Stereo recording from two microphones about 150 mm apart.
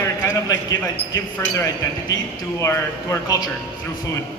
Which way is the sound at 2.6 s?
20° left (ahead or behind).